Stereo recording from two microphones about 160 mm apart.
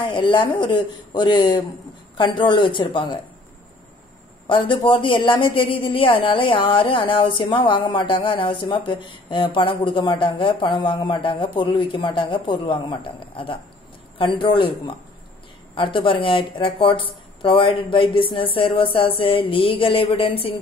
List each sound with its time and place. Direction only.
0.0 s speech: 30° left (ahead or behind)
4.5 s a woman's voice: 30° left (ahead or behind)
15.7 s a woman's voice: 30° left (ahead or behind)